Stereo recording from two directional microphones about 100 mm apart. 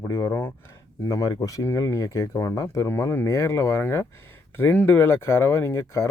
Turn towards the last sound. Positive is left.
turn(degrees=25)  # may be behind; listen again after turning